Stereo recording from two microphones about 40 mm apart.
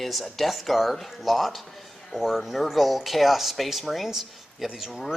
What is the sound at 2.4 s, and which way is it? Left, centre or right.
Speech, centre.